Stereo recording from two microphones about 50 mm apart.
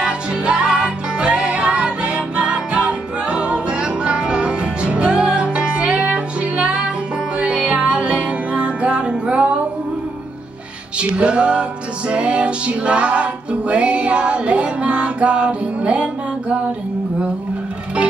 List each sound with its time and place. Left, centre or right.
0.0 s music: centre
11.0 s music: right